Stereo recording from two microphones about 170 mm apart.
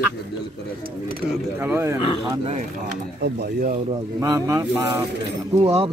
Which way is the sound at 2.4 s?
35° right (ahead or behind).